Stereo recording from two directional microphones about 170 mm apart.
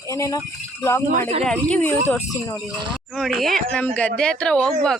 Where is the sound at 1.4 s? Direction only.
10° left (ahead or behind).